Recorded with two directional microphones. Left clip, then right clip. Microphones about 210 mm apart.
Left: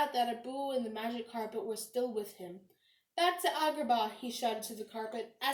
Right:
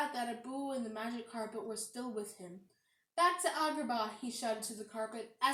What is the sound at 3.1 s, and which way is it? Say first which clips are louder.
A woman's voice: left 1 dB; 5° right (ahead or behind).